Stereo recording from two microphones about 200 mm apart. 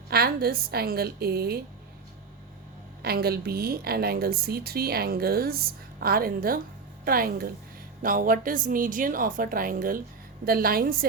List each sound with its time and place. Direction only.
0.1 s a woman's voice: 50° right (ahead or behind)
3.0 s a woman's voice: 50° right (ahead or behind)